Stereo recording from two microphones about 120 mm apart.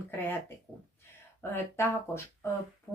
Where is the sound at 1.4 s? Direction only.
20° left (ahead or behind).